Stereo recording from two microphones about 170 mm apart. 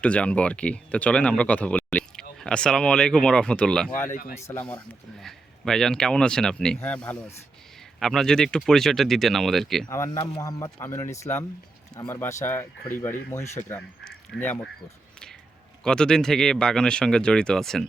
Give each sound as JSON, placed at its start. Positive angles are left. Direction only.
{"t": 0.0, "sound": "speech", "side_deg": 5}
{"t": 4.1, "sound": "speech", "side_deg": 60}
{"t": 4.4, "sound": "speech", "side_deg": 10}
{"t": 9.9, "sound": "speech", "side_deg": 20}
{"t": 13.7, "sound": "speech", "side_deg": 10}
{"t": 15.8, "sound": "speech", "side_deg": 5}